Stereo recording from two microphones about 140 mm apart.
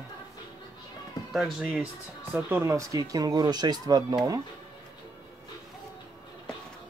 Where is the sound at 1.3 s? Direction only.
Centre (ahead or behind).